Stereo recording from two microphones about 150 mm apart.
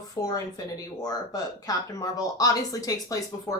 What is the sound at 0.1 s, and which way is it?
Speech, 25° left (ahead or behind).